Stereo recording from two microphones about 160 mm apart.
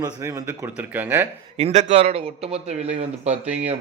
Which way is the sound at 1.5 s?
45° right (ahead or behind).